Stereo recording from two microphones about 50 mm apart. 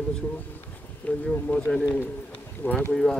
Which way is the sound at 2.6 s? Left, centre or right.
Left.